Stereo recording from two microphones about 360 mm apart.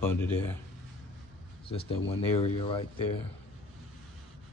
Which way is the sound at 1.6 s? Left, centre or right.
Centre.